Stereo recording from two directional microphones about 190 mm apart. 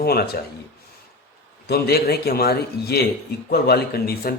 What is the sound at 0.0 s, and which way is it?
Speech, 55° left (ahead or behind).